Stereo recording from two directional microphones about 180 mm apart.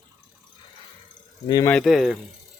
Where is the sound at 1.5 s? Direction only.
20° left (ahead or behind).